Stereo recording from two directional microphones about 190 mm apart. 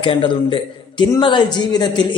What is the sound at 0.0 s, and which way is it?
A man's voice, 25° left (ahead or behind).